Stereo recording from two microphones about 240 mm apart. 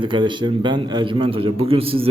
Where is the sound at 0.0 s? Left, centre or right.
Centre.